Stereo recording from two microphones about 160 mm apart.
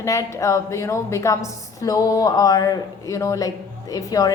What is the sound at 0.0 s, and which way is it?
A woman's voice, 20° left (ahead or behind).